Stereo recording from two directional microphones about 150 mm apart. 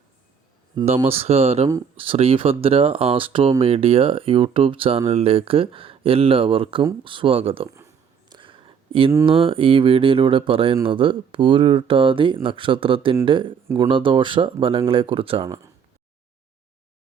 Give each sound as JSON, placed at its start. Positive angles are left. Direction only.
{"t": 1.0, "sound": "speech", "side_deg": -40}
{"t": 8.3, "sound": "a sound", "side_deg": -35}
{"t": 9.2, "sound": "speech", "side_deg": -35}
{"t": 15.4, "sound": "speech", "side_deg": -20}